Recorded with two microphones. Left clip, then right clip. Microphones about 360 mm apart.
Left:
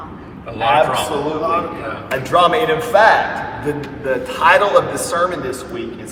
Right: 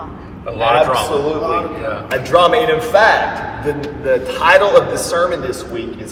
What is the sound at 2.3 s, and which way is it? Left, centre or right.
A man's voice, centre.